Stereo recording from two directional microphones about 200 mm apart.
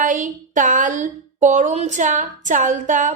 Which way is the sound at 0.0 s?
40° right (ahead or behind).